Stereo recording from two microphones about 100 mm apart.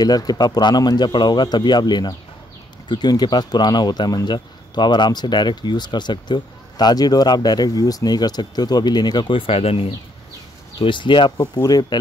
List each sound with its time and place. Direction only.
0.0 s speech: 40° left (ahead or behind)
9.5 s speech: 80° left
10.8 s speech: 55° left (ahead or behind)